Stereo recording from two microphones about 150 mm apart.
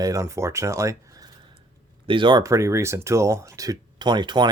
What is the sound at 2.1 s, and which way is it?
Speech, 35° right (ahead or behind).